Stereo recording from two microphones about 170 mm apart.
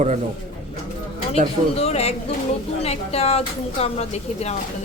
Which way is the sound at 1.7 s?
40° left (ahead or behind).